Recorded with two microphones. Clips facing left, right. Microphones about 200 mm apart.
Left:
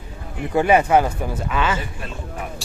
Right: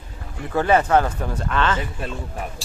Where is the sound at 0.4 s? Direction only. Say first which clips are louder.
Left 2 dB; 15° left (ahead or behind).